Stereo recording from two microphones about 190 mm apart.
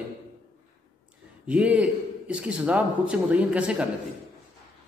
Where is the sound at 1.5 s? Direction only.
5° right (ahead or behind).